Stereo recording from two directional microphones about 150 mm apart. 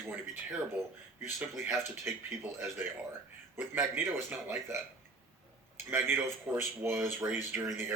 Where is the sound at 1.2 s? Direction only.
10° right (ahead or behind).